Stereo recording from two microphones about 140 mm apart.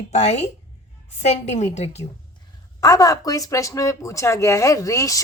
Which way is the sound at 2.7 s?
25° left (ahead or behind).